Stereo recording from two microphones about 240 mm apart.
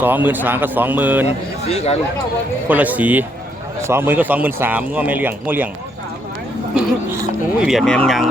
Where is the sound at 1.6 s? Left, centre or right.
Left.